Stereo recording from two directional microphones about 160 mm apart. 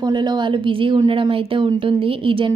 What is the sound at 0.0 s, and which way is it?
A woman's voice, 30° right (ahead or behind).